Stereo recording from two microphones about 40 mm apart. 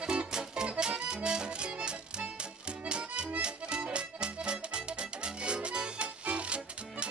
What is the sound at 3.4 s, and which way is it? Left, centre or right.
Music, right.